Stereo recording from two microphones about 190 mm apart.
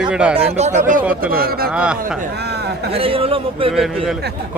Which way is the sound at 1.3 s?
50° right (ahead or behind).